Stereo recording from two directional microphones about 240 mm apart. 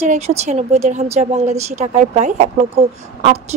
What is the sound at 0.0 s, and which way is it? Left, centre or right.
A woman's voice, right.